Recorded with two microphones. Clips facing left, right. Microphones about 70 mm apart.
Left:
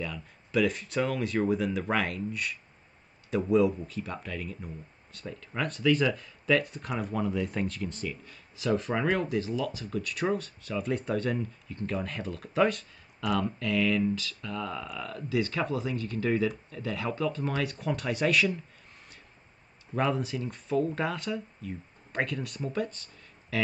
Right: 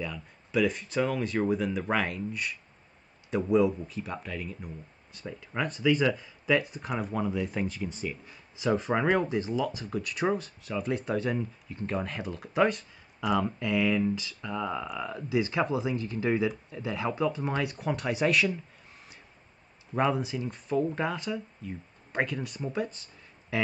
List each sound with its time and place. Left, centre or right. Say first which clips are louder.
0.0 s speech: even; centre
17.6 s speech: right 1 dB; centre
19.9 s speech: right 1 dB; centre